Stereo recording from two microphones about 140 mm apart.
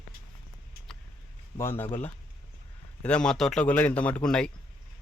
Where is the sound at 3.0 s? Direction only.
5° left (ahead or behind).